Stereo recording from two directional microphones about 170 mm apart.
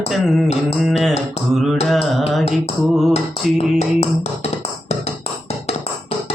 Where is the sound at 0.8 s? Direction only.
Centre (ahead or behind).